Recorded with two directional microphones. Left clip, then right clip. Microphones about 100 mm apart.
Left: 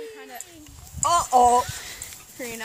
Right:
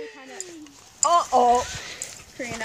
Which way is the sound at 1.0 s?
5° left (ahead or behind).